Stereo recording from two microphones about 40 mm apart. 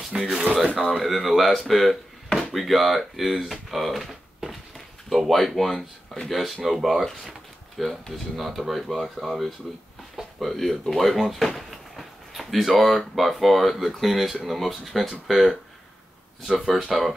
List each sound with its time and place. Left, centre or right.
0.1 s speech: centre
0.7 s speech: centre
1.7 s a sound: centre
2.5 s speech: centre
16.5 s speech: centre